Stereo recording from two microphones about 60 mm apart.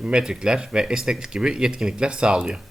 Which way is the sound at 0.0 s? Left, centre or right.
Centre.